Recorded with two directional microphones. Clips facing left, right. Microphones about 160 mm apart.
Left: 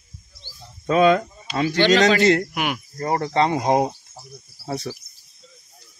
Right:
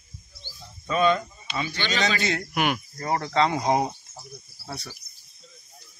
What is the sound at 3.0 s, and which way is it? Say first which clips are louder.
Speech: left 5 dB; 40° left (ahead or behind).